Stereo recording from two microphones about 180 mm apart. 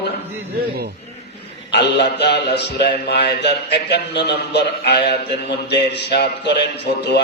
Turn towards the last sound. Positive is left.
turn(degrees=70)  # may be behind; listen again after turning